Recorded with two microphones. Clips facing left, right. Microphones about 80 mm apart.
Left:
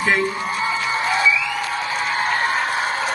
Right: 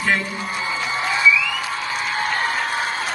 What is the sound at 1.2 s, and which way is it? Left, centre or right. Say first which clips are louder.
Music: right 5 dB; left.